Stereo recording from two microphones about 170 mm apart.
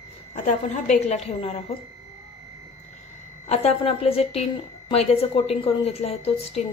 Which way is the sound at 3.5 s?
35° left (ahead or behind).